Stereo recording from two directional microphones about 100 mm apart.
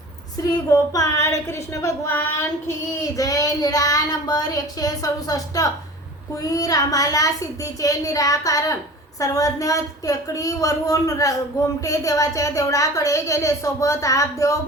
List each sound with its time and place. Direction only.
0.3 s speech: 35° left (ahead or behind)
3.2 s speech: 35° left (ahead or behind)